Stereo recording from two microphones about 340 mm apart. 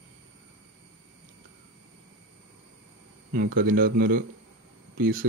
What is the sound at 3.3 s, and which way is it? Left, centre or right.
Speech, right.